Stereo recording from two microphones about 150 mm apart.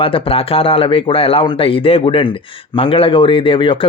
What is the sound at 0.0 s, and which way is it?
Speech, 35° left (ahead or behind).